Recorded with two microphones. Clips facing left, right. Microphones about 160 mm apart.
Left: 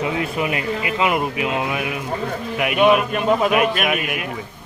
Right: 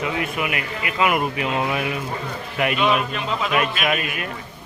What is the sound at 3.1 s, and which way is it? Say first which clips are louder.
Speech: left 6 dB; 50° left (ahead or behind).